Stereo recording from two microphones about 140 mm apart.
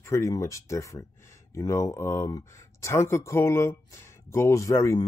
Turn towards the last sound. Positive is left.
turn(degrees=20)  # may be behind; listen again after turning